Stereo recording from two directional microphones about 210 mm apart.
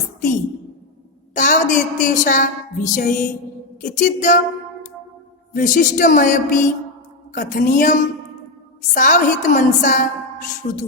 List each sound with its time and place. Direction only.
1.3 s a woman's voice: 40° left (ahead or behind)
3.8 s music: 35° left (ahead or behind)
5.5 s a woman's voice: 35° left (ahead or behind)